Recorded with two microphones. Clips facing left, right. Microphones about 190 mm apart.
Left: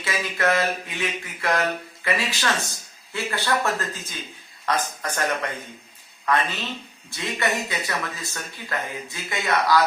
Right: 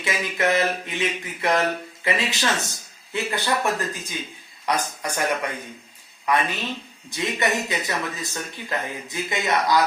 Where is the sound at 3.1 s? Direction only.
20° right (ahead or behind).